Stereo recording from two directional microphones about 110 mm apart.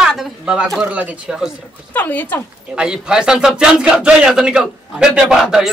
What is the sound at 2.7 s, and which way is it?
A man's voice, 5° right (ahead or behind).